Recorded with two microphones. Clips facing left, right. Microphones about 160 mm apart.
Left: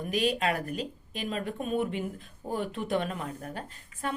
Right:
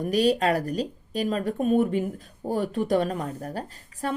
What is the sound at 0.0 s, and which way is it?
A woman's voice, 40° right (ahead or behind).